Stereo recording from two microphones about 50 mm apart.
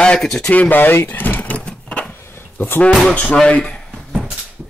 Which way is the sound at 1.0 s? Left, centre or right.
Left.